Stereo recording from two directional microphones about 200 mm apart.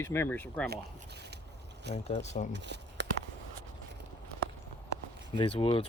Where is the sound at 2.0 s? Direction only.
35° left (ahead or behind).